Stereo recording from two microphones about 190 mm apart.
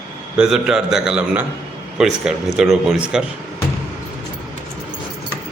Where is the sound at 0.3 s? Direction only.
5° right (ahead or behind).